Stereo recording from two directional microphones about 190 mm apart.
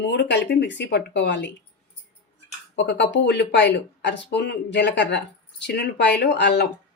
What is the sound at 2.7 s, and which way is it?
Speech, 70° left (ahead or behind).